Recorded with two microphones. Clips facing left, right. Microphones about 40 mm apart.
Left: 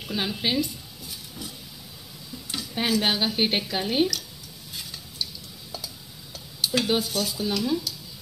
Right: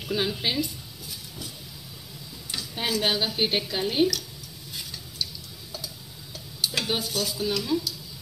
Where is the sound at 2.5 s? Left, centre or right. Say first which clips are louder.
Left 3 dB; left.